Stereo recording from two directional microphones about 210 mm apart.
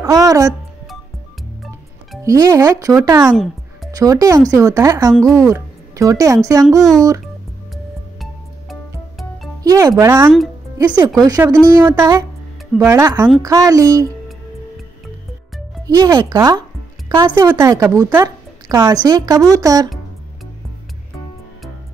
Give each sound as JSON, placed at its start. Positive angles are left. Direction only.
{"t": 0.0, "sound": "speech", "side_deg": -15}
{"t": 2.2, "sound": "a woman's voice", "side_deg": -15}
{"t": 7.7, "sound": "music", "side_deg": 0}
{"t": 9.6, "sound": "a woman's voice", "side_deg": -15}
{"t": 16.0, "sound": "a woman's voice", "side_deg": -15}